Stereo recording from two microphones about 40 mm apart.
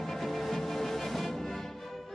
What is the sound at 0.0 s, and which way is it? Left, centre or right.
Music, centre.